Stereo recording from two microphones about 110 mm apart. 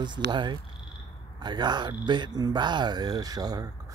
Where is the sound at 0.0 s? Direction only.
45° right (ahead or behind).